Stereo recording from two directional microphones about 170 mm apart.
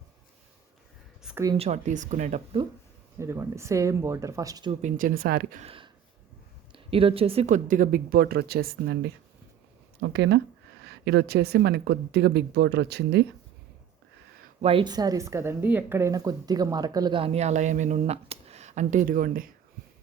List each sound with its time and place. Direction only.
1.5 s speech: 40° right (ahead or behind)
3.2 s speech: 15° right (ahead or behind)
4.7 s speech: 45° right (ahead or behind); by 5.6 s 60° right (ahead or behind)
5.6 s a sound: 30° right (ahead or behind)
6.7 s speech: 30° right (ahead or behind); by 9.0 s 70° right (ahead or behind)
10.0 s speech: 90° right
14.6 s a woman's voice: 30° right (ahead or behind); by 19.5 s 55° right (ahead or behind)